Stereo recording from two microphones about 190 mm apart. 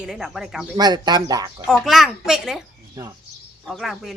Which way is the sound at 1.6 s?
Centre (ahead or behind).